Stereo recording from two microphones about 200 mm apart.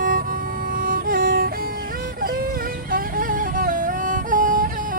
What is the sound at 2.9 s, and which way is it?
Music, 45° right (ahead or behind).